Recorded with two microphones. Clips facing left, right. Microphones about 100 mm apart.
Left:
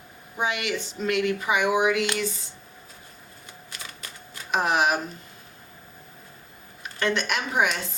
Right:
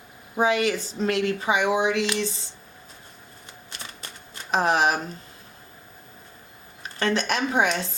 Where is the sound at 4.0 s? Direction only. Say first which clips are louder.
Even; 30° right (ahead or behind).